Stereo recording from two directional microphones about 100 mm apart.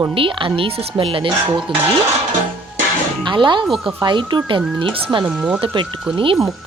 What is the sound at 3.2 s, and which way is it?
Speech, 50° right (ahead or behind).